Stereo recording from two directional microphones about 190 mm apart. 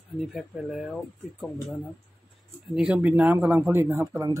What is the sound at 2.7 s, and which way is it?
Speech, 5° right (ahead or behind).